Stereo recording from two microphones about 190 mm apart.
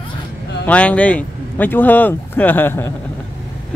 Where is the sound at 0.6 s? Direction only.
5° left (ahead or behind).